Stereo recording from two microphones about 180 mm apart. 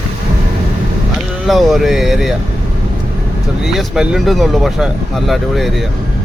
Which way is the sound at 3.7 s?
Centre (ahead or behind).